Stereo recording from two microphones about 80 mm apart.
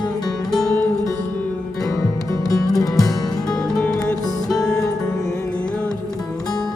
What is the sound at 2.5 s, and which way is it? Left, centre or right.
Music, left.